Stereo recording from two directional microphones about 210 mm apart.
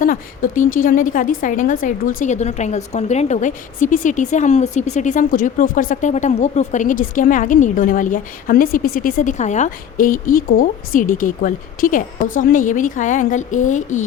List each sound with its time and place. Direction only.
0.0 s a woman's voice: 40° left (ahead or behind)